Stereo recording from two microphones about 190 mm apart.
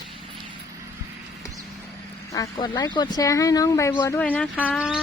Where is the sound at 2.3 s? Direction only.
20° left (ahead or behind).